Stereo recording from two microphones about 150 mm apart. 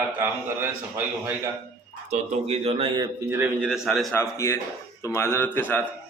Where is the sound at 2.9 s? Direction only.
20° right (ahead or behind); by 4.1 s centre (ahead or behind).